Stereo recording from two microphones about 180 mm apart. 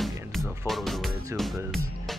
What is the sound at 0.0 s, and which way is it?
Music, centre (ahead or behind).